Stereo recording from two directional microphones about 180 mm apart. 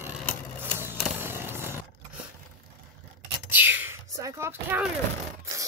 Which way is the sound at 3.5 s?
10° right (ahead or behind).